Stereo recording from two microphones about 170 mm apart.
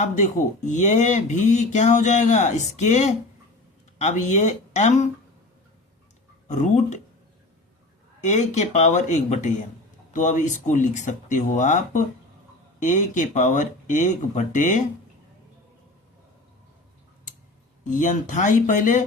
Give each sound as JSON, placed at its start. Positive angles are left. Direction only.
{"t": 0.0, "sound": "speech", "side_deg": 45}
{"t": 6.5, "sound": "speech", "side_deg": 45}
{"t": 8.2, "sound": "speech", "side_deg": 45}
{"t": 17.8, "sound": "speech", "side_deg": 45}